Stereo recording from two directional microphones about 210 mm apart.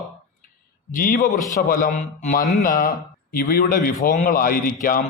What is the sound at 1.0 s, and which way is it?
Speech, 40° left (ahead or behind).